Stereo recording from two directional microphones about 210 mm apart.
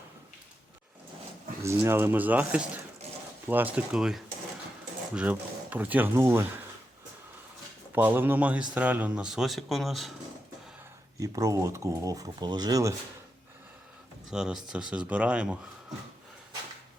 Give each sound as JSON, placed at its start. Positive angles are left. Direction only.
{"t": 1.6, "sound": "speech", "side_deg": -10}
{"t": 7.9, "sound": "speech", "side_deg": -10}
{"t": 11.2, "sound": "speech", "side_deg": -15}
{"t": 14.3, "sound": "speech", "side_deg": 0}